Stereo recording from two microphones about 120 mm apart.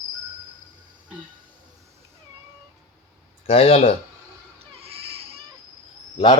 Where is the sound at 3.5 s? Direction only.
55° left (ahead or behind).